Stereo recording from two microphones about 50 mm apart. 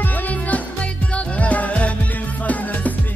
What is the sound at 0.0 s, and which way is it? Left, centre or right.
Music, left.